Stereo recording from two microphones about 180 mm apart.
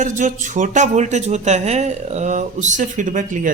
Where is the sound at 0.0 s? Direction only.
45° right (ahead or behind).